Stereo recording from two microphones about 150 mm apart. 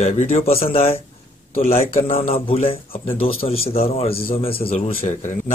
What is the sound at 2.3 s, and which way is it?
Speech, 40° left (ahead or behind).